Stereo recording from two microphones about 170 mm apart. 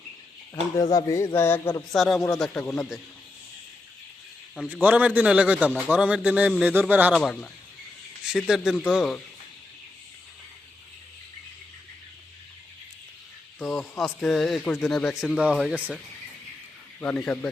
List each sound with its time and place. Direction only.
0.5 s speech: 20° left (ahead or behind)
1.9 s speech: centre (ahead or behind)
4.7 s a man's voice: 10° right (ahead or behind)
7.2 s speech: centre (ahead or behind)
13.6 s speech: centre (ahead or behind)
17.0 s speech: 10° left (ahead or behind)